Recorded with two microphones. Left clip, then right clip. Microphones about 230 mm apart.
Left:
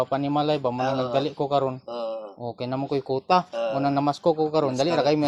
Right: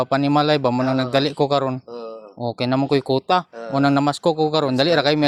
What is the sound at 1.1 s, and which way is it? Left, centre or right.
Speech, right.